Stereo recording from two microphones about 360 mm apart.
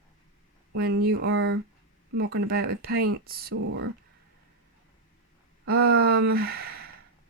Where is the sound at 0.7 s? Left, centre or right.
Right.